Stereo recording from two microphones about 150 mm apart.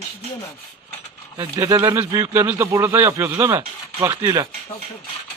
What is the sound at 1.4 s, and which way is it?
Speech, 20° right (ahead or behind).